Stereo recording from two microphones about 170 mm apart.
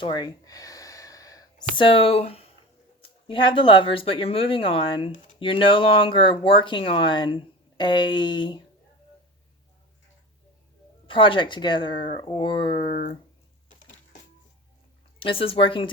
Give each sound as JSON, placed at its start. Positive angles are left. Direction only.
{"t": 0.0, "sound": "speech", "side_deg": 25}
{"t": 11.0, "sound": "speech", "side_deg": 30}
{"t": 15.2, "sound": "speech", "side_deg": 30}